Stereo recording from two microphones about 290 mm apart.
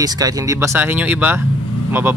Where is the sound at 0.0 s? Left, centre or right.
Centre.